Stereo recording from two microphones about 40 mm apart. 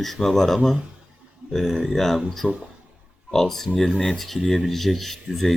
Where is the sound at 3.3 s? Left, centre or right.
Centre.